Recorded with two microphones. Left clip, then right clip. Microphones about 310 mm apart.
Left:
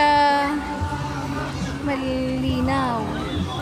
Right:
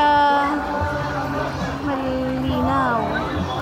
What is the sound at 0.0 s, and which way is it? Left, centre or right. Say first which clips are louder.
Music: right 1 dB; centre.